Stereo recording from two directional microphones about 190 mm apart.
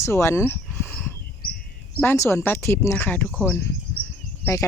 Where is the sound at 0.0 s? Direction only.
15° left (ahead or behind).